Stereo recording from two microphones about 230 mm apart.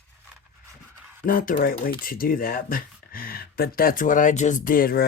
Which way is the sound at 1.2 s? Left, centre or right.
Left.